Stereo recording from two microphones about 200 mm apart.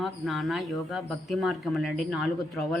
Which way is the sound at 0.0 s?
Centre (ahead or behind).